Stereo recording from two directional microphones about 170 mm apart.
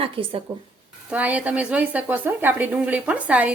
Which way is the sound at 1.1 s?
10° right (ahead or behind).